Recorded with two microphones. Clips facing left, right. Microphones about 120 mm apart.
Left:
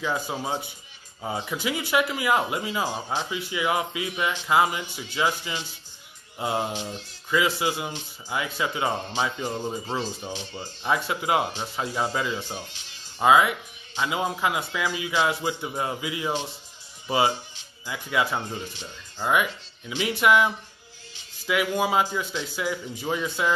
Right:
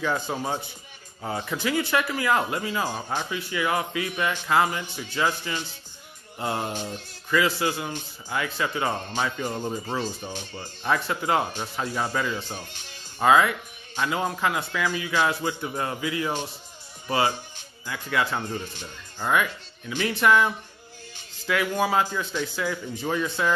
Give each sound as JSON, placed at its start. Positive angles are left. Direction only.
{"t": 0.0, "sound": "speech", "side_deg": 10}
{"t": 12.5, "sound": "speech", "side_deg": -50}
{"t": 13.2, "sound": "speech", "side_deg": 15}
{"t": 17.8, "sound": "speech", "side_deg": 15}